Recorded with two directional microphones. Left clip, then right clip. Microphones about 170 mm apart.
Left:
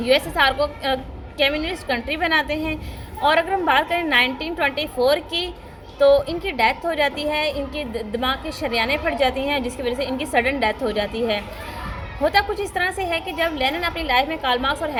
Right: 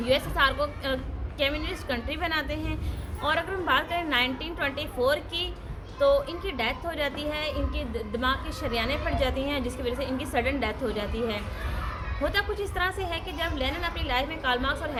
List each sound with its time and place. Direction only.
0.0 s a woman's voice: 20° left (ahead or behind)